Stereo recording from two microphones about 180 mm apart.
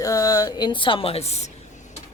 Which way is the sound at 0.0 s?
20° left (ahead or behind).